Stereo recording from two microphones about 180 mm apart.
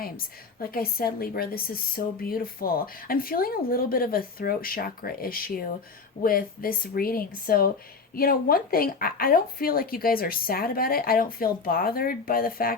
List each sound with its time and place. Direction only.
0.6 s speech: 55° left (ahead or behind)